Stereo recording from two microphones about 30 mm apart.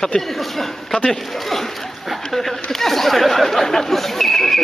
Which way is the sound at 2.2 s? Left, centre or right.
Centre.